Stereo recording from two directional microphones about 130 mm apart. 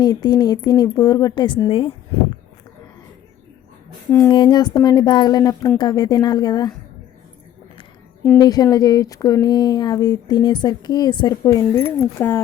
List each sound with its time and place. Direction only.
0.0 s speech: 30° left (ahead or behind)
4.3 s speech: 35° left (ahead or behind)
8.4 s speech: 30° left (ahead or behind)
11.7 s speech: 15° left (ahead or behind)